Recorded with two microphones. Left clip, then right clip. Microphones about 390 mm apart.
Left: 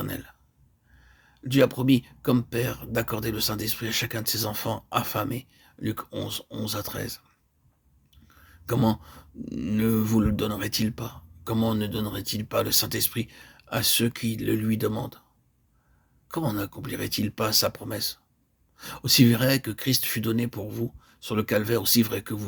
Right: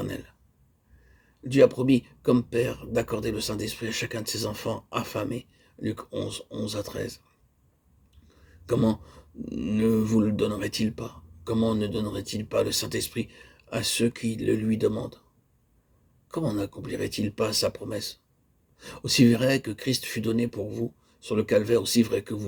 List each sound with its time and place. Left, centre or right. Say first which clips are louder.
0.0 s a sound: even; left
1.5 s speech: right 2 dB; left
8.3 s speech: right 2 dB; left
16.3 s speech: even; left